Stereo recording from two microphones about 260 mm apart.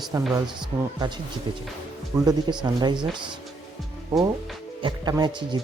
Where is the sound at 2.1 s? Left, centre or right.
Centre.